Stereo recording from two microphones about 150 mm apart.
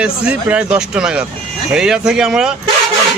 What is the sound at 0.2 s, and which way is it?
Speech, 10° right (ahead or behind).